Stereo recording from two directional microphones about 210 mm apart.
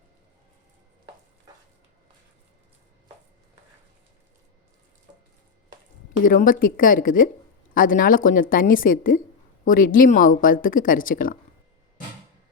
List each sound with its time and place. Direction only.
6.2 s speech: 40° left (ahead or behind)